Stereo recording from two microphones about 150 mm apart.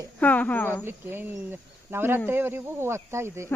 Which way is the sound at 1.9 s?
15° right (ahead or behind).